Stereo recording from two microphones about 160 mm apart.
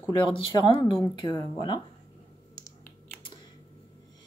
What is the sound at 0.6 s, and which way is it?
Speech, 30° left (ahead or behind).